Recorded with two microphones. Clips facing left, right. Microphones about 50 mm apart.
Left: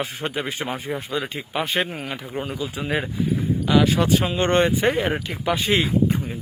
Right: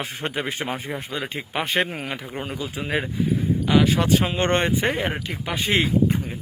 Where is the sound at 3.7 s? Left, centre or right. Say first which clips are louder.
Left 1 dB; right.